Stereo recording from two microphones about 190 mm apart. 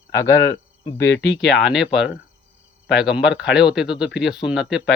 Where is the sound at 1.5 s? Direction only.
Centre (ahead or behind).